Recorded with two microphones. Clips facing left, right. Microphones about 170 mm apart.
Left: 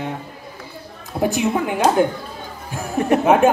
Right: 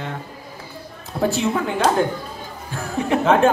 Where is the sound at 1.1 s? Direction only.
15° left (ahead or behind).